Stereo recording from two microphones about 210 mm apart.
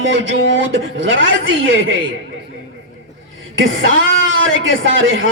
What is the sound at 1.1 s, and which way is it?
Speech, 70° right (ahead or behind).